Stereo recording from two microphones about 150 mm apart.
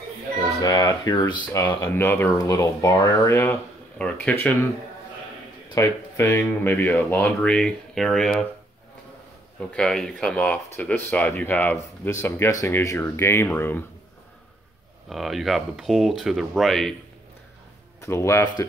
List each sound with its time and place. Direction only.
0.6 s speech: 25° left (ahead or behind)
5.8 s speech: 20° left (ahead or behind); by 8.5 s centre (ahead or behind)
9.8 s speech: 5° left (ahead or behind)
15.0 s speech: centre (ahead or behind)
18.0 s speech: 20° left (ahead or behind)